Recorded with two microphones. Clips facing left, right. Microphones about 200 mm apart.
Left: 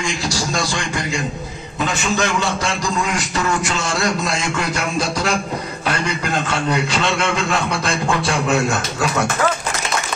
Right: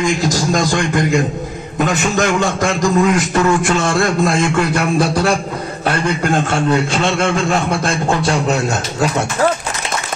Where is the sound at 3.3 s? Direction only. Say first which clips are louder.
Right 7 dB; 55° right (ahead or behind).